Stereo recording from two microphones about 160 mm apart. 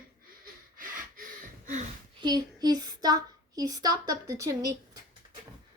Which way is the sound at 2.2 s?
25° right (ahead or behind).